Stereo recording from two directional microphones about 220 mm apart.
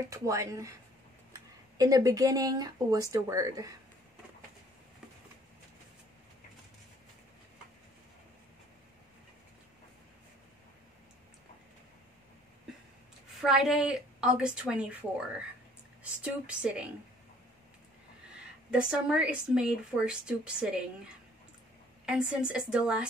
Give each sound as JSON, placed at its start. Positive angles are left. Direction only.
{"t": 0.1, "sound": "speech", "side_deg": -15}
{"t": 13.4, "sound": "a woman's voice", "side_deg": 0}
{"t": 18.7, "sound": "a woman's voice", "side_deg": -5}
{"t": 22.0, "sound": "a woman's voice", "side_deg": -5}